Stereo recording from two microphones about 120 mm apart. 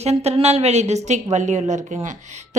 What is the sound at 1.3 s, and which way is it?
Speech, 80° right.